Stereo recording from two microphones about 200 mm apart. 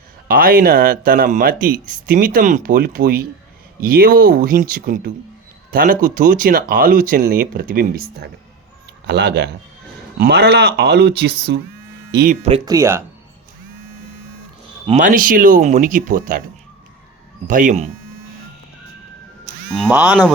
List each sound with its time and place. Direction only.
0.3 s speech: 45° right (ahead or behind)
12.4 s speech: 30° right (ahead or behind)
12.6 s speech: 15° right (ahead or behind)
14.8 s speech: 40° right (ahead or behind)
17.5 s speech: 40° right (ahead or behind)
19.7 s speech: 5° right (ahead or behind)